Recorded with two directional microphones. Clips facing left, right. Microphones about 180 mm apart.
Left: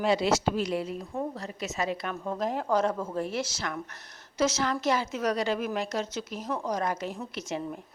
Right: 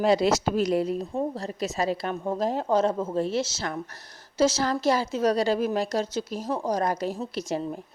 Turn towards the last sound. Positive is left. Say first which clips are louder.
# right 5 dB
turn(degrees=-35)  # may be behind; listen again after turning